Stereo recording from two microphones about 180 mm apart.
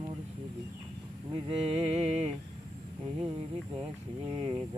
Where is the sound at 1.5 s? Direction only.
30° right (ahead or behind).